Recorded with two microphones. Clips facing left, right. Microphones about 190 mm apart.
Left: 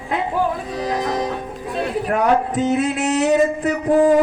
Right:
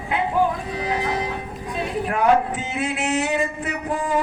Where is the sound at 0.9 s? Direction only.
40° left (ahead or behind).